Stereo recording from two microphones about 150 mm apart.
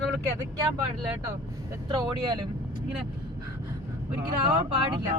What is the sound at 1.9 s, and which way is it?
Speech, 30° right (ahead or behind).